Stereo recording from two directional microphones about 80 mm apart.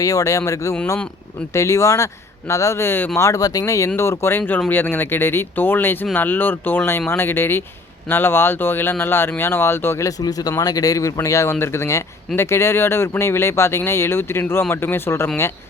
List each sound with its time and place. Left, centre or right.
0.0 s speech: left
3.2 s speech: left
10.1 s speech: left